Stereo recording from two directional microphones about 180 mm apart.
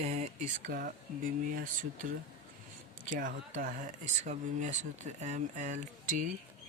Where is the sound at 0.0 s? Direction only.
40° right (ahead or behind).